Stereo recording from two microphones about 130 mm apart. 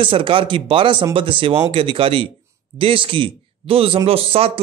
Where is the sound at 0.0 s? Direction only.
40° right (ahead or behind).